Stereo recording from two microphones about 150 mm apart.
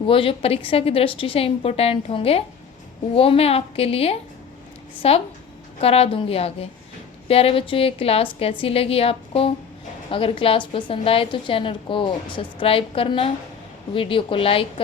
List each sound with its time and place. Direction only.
0.0 s a woman's voice: 35° left (ahead or behind)